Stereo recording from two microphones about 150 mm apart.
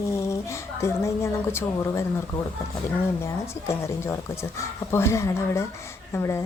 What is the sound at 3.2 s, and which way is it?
Speech, 20° left (ahead or behind).